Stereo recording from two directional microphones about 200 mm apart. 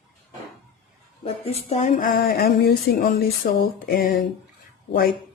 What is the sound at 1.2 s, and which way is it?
Speech, 30° left (ahead or behind).